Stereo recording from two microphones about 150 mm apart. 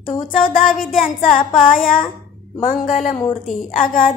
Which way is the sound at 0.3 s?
65° left (ahead or behind).